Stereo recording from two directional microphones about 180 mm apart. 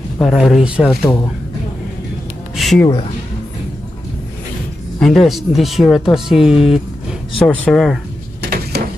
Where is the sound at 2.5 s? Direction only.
Centre (ahead or behind).